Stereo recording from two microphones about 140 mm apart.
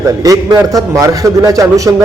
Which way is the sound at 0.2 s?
25° right (ahead or behind).